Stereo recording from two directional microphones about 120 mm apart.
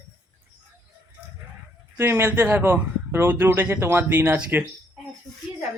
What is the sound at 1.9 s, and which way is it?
A man's voice, 20° right (ahead or behind).